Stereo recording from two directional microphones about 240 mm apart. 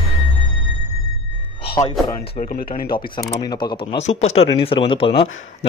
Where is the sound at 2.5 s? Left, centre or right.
Left.